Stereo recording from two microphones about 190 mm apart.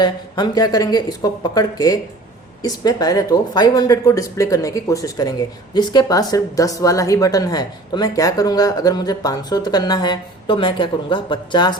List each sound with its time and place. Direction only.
0.0 s speech: 20° left (ahead or behind)